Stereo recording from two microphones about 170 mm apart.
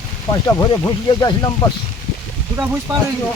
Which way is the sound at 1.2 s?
25° left (ahead or behind).